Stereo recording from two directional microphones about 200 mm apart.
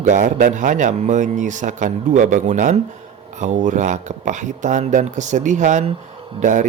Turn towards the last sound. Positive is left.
turn(degrees=-40)  # may be behind; listen again after turning